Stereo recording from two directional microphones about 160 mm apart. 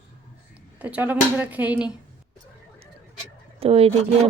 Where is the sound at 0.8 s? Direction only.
10° right (ahead or behind).